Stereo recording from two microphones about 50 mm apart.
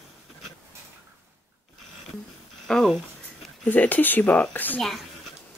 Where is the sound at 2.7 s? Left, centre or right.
Centre.